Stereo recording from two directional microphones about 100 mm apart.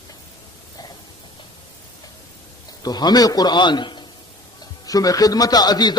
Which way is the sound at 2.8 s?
45° left (ahead or behind).